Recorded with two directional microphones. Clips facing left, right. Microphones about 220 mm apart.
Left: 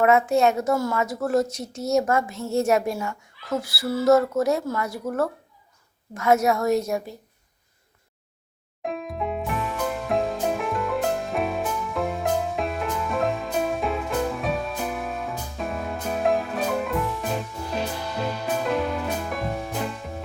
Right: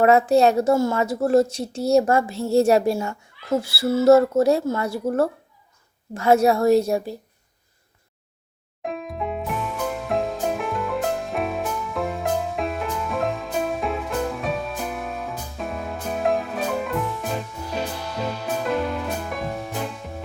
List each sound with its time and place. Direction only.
0.0 s a woman's voice: 35° right (ahead or behind)
8.8 s music: centre (ahead or behind)